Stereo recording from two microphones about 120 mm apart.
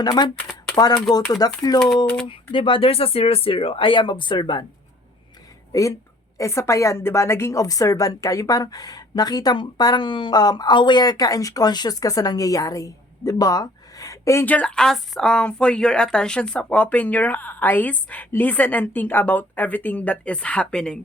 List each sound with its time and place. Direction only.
0.0 s speech: 35° left (ahead or behind)
2.2 s speech: 45° left (ahead or behind)
5.7 s a woman's voice: 30° left (ahead or behind)
14.4 s speech: 10° left (ahead or behind)